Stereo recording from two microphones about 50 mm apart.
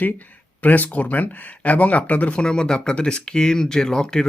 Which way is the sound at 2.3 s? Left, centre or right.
Centre.